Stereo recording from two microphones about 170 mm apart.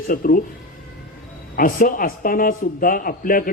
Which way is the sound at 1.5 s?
55° left (ahead or behind).